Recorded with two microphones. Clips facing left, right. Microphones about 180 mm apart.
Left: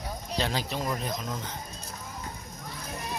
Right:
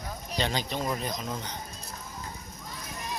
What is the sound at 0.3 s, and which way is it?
Speech, centre (ahead or behind).